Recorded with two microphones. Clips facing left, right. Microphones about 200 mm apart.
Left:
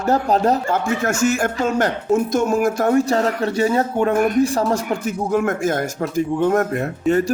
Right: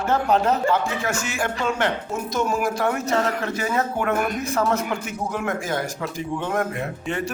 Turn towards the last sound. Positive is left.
turn(degrees=40)  # may be behind; listen again after turning